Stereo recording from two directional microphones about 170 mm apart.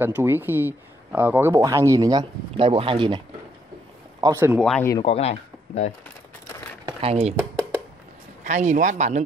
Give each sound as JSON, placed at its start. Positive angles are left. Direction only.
{"t": 0.0, "sound": "speech", "side_deg": -10}
{"t": 4.2, "sound": "speech", "side_deg": -15}
{"t": 4.6, "sound": "speech", "side_deg": 5}
{"t": 5.0, "sound": "speech", "side_deg": 35}
{"t": 6.9, "sound": "speech", "side_deg": -35}
{"t": 8.5, "sound": "speech", "side_deg": -45}